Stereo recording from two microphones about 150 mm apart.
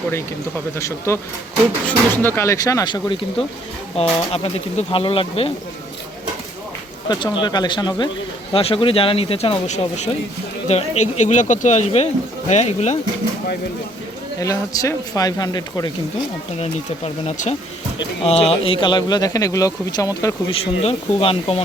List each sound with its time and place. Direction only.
0.8 s speech: 20° left (ahead or behind); by 5.5 s 40° left (ahead or behind)
7.1 s speech: 30° left (ahead or behind); by 13.0 s 50° left (ahead or behind)
14.3 s speech: 20° left (ahead or behind)
17.2 s speech: 55° left (ahead or behind)
18.2 s speech: 40° left (ahead or behind); by 20.3 s 25° left (ahead or behind)
20.5 s speech: 40° left (ahead or behind)